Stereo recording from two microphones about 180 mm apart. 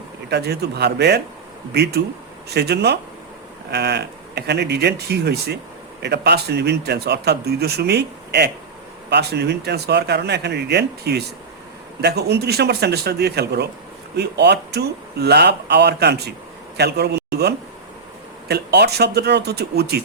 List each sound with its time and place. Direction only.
0.3 s a man's voice: 65° right (ahead or behind)